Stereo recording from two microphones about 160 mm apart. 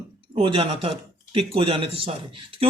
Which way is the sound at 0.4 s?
35° right (ahead or behind).